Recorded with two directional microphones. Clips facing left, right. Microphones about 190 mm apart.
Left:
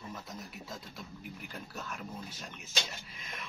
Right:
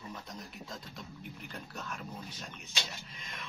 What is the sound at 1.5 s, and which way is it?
Speech, centre (ahead or behind).